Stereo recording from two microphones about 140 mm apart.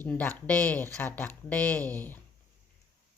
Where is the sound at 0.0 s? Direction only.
15° left (ahead or behind).